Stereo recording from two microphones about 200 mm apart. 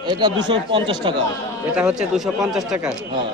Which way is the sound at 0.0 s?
20° right (ahead or behind).